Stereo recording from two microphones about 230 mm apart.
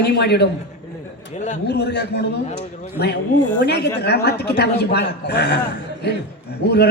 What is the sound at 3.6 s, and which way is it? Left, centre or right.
A man's voice, left.